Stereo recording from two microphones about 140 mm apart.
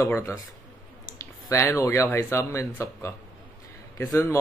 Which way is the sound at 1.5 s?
20° left (ahead or behind).